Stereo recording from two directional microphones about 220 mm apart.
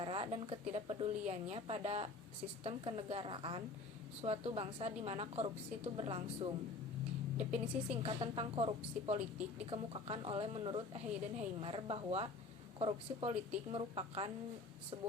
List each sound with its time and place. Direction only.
0.0 s a woman's voice: 25° right (ahead or behind)
8.0 s a woman's voice: 25° right (ahead or behind)